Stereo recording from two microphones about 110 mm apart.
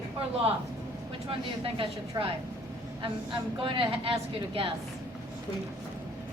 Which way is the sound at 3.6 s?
55° right (ahead or behind).